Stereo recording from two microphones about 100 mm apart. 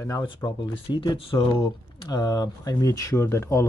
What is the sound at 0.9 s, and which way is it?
Speech, 55° left (ahead or behind).